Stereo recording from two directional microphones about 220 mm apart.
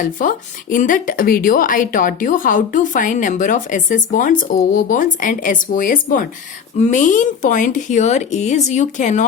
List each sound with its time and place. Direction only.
0.0 s a woman's voice: 35° left (ahead or behind)